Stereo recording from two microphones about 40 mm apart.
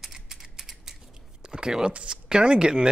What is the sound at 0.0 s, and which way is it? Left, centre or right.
Scissors, centre.